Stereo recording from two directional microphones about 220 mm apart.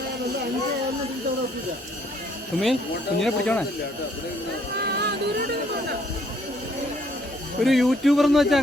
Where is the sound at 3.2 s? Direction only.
5° left (ahead or behind).